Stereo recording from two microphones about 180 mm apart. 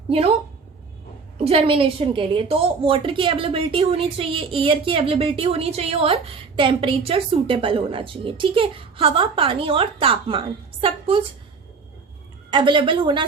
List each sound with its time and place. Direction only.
0.1 s a woman's voice: 35° right (ahead or behind)
1.5 s a woman's voice: 30° right (ahead or behind)
12.5 s a woman's voice: 25° right (ahead or behind)